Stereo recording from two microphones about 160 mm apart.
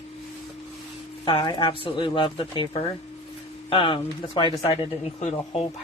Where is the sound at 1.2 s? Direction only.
30° left (ahead or behind).